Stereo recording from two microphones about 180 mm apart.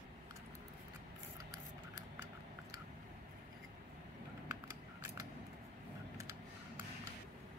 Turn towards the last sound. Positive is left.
turn(degrees=-15)  # may be behind; listen again after turning